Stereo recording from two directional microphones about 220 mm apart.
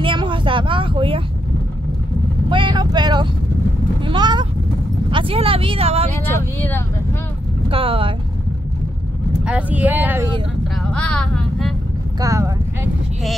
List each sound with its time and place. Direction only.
0.0 s vehicle: 25° right (ahead or behind)
2.5 s vehicle: 20° right (ahead or behind)
4.0 s a sound: 20° right (ahead or behind)
5.1 s vehicle: 25° right (ahead or behind)
6.1 s vehicle: 10° left (ahead or behind)
7.6 s vehicle: 25° right (ahead or behind)
9.4 s a sound: 5° right (ahead or behind)
10.9 s a sound: 5° left (ahead or behind)
12.2 s clip-clop: 15° right (ahead or behind)